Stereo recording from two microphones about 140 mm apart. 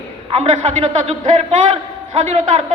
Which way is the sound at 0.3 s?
55° right (ahead or behind).